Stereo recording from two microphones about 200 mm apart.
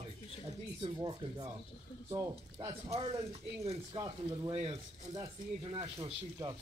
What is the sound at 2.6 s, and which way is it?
Speech, 15° right (ahead or behind).